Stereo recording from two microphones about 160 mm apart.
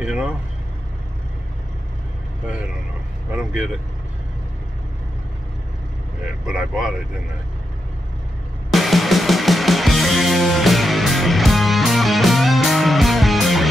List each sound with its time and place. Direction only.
0.0 s vehicle: 5° right (ahead or behind)
6.4 s speech: 5° right (ahead or behind)
8.7 s music: centre (ahead or behind)